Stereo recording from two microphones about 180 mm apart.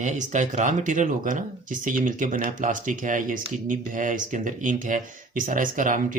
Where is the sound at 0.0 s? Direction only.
45° right (ahead or behind).